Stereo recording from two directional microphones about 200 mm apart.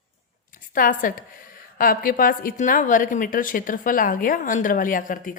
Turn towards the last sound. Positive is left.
turn(degrees=40)  # may be behind; listen again after turning